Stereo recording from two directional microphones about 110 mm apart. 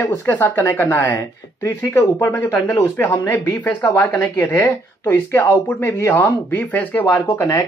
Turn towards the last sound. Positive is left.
turn(degrees=30)  # may be behind; listen again after turning